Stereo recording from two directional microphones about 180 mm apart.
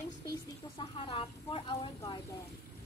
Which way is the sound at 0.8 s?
25° left (ahead or behind).